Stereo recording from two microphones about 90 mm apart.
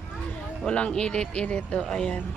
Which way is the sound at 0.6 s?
10° left (ahead or behind).